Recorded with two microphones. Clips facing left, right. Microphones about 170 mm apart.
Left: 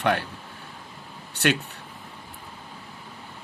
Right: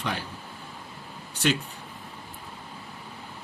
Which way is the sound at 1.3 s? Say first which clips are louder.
Left 2 dB; 65° left (ahead or behind).